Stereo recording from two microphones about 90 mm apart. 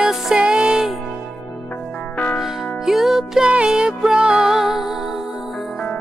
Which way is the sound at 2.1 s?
15° left (ahead or behind).